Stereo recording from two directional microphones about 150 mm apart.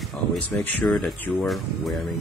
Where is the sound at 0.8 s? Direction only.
5° left (ahead or behind).